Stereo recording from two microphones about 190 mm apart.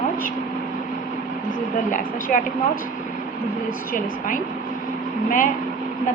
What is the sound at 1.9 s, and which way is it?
A woman's voice, 45° left (ahead or behind).